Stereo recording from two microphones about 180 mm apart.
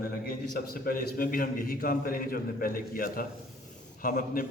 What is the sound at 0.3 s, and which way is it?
A man's voice, 55° left (ahead or behind).